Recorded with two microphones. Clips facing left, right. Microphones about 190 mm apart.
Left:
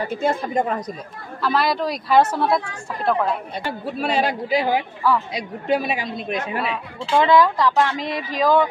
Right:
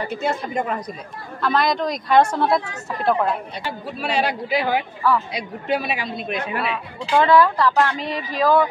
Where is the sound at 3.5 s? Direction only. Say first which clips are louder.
Left 3 dB; 50° left (ahead or behind).